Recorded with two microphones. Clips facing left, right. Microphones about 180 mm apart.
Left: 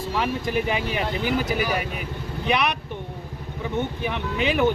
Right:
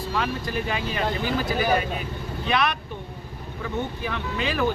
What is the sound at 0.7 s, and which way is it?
Speech, 15° left (ahead or behind).